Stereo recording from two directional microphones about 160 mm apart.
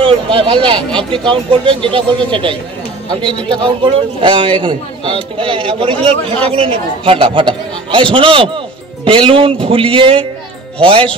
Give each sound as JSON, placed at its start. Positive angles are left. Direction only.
{"t": 0.0, "sound": "a man's voice", "side_deg": -35}